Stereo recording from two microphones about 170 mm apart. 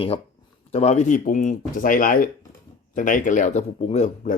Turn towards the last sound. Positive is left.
turn(degrees=40)  # may be behind; listen again after turning